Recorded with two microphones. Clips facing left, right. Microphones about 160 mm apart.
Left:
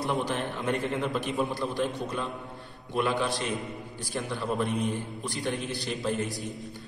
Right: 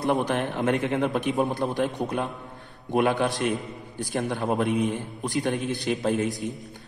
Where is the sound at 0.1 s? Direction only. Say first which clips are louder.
Right 7 dB; 55° right (ahead or behind).